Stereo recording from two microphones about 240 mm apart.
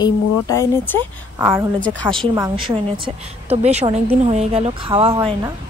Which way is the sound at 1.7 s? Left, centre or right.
Centre.